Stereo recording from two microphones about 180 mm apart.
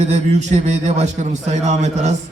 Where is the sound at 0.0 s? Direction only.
40° right (ahead or behind).